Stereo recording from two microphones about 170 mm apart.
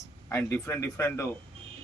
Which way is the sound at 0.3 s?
15° left (ahead or behind).